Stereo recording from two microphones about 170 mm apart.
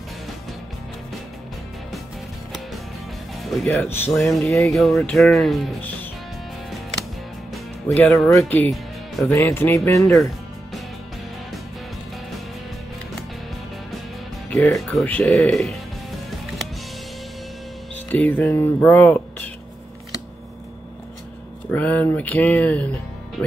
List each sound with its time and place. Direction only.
3.4 s speech: 5° left (ahead or behind)
4.1 s music: 5° left (ahead or behind)
7.9 s music: 5° left (ahead or behind)
8.4 s speech: 5° left (ahead or behind)
14.5 s music: 5° left (ahead or behind)
18.1 s speech: 10° left (ahead or behind)
21.6 s speech: 10° left (ahead or behind)